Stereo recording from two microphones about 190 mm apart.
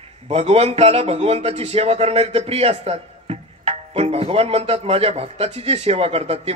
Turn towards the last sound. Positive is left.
turn(degrees=-30)  # may be behind; listen again after turning